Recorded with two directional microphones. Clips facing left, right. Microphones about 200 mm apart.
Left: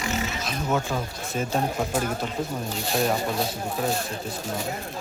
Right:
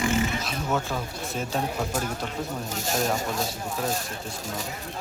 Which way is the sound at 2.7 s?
45° right (ahead or behind).